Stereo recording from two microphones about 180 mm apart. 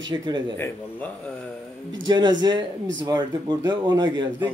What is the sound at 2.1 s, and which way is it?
Speech, 25° right (ahead or behind).